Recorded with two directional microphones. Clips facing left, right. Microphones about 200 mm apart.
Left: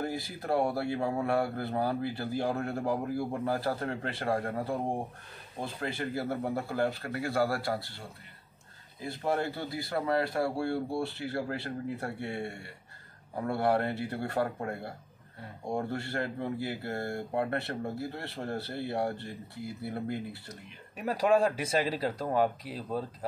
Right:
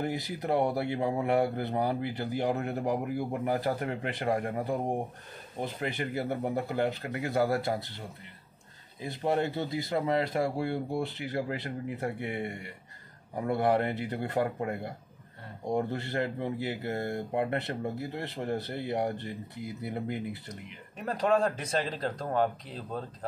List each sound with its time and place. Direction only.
0.0 s speech: 20° right (ahead or behind)
9.0 s speech: 20° right (ahead or behind)
21.0 s speech: 10° left (ahead or behind)